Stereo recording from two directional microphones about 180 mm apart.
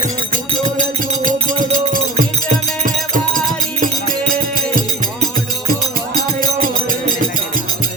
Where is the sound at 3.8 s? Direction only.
50° right (ahead or behind).